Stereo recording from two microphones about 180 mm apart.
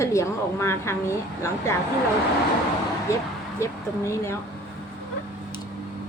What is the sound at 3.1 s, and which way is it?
Speech, 15° left (ahead or behind).